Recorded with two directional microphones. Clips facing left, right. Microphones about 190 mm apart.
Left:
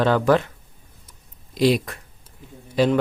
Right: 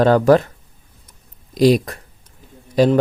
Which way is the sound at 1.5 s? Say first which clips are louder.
Right 5 dB; 45° right (ahead or behind).